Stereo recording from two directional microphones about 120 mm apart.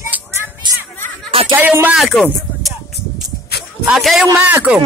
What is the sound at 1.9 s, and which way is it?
Speech, centre (ahead or behind).